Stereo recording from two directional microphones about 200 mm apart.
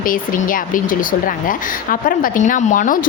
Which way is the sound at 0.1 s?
45° left (ahead or behind).